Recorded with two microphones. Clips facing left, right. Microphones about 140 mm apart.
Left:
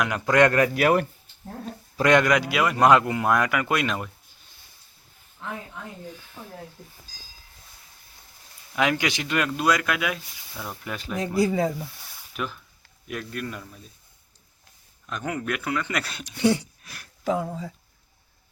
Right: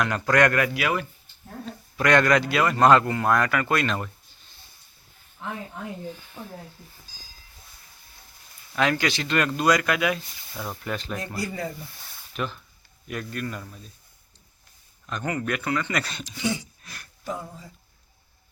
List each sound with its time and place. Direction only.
0.0 s speech: 10° left (ahead or behind)
0.3 s speech: 30° left (ahead or behind)
0.7 s speech: 45° left (ahead or behind)
2.0 s speech: 20° left (ahead or behind)
8.7 s speech: 15° left (ahead or behind)
15.0 s speech: 5° left (ahead or behind)
16.2 s a sound: 60° left (ahead or behind)
16.8 s speech: 5° left (ahead or behind)
17.2 s speech: 85° left